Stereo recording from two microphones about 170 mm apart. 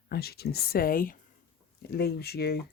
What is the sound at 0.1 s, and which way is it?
Speech, 65° left (ahead or behind).